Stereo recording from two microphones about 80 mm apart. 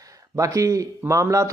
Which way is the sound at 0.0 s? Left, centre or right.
Right.